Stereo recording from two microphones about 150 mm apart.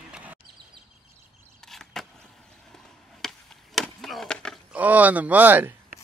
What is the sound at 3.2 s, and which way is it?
Chop, centre (ahead or behind).